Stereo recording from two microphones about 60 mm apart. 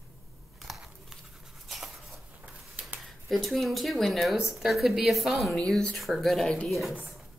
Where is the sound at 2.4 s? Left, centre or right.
Right.